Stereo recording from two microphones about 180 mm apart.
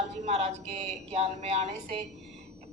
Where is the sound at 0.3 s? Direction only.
35° right (ahead or behind).